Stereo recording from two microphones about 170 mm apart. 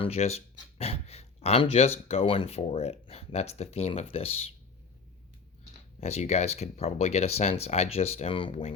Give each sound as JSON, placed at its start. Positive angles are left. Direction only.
{"t": 0.0, "sound": "speech", "side_deg": 40}
{"t": 6.0, "sound": "speech", "side_deg": 40}